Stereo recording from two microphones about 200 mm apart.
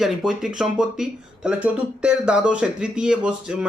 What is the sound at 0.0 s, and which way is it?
Speech, centre (ahead or behind).